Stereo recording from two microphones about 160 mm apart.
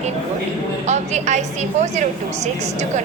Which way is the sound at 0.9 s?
45° right (ahead or behind).